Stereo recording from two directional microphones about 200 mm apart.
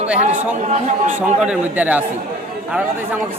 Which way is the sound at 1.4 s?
5° right (ahead or behind).